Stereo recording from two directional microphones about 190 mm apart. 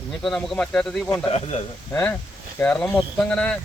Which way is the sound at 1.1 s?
30° left (ahead or behind).